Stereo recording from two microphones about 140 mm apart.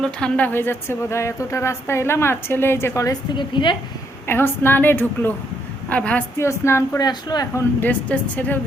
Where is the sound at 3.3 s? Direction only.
35° left (ahead or behind).